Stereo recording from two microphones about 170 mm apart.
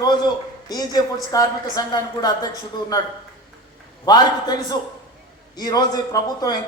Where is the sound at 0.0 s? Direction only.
25° left (ahead or behind).